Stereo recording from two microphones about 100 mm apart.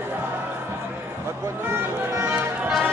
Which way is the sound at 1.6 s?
25° right (ahead or behind).